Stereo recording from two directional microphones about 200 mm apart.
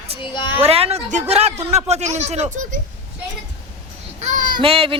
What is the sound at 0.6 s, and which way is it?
Speech, 30° right (ahead or behind).